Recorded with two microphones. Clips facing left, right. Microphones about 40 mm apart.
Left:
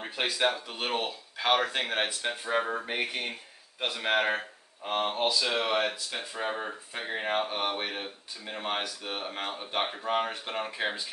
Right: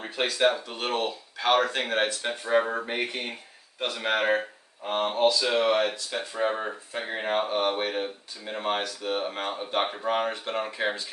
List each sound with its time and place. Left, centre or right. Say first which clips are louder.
0.0 s speech: right 4 dB; centre
2.9 s speech: right 2 dB; centre
6.5 s speech: right 4 dB; centre